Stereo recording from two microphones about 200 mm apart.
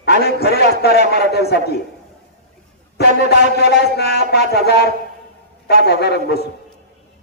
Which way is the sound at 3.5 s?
55° left (ahead or behind).